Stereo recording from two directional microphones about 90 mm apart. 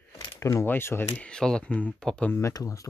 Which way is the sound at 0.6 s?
25° left (ahead or behind).